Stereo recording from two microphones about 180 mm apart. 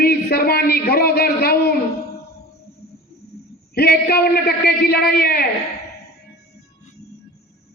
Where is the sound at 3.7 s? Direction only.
65° left (ahead or behind).